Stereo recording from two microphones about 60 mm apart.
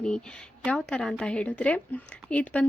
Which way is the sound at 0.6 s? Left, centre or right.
Centre.